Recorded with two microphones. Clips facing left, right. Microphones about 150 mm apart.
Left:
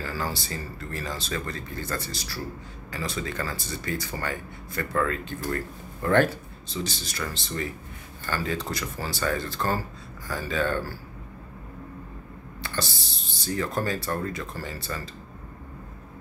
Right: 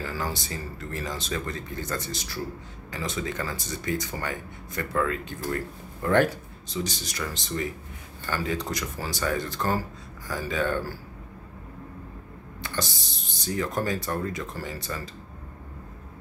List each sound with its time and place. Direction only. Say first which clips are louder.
0.0 s speech: even; 15° right (ahead or behind)
12.6 s a sound: left 1 dB; 20° right (ahead or behind)
13.3 s speech: even; 15° right (ahead or behind)